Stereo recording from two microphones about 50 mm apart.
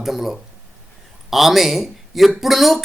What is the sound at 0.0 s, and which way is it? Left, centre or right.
Speech, centre.